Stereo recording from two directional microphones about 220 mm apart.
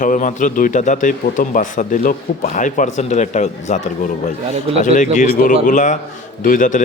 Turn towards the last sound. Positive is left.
turn(degrees=35)  # may be behind; listen again after turning